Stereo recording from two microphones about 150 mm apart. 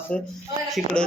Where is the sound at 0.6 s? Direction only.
Centre (ahead or behind).